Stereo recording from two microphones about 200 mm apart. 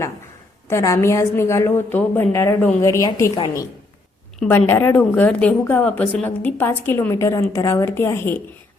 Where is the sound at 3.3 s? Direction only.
25° left (ahead or behind).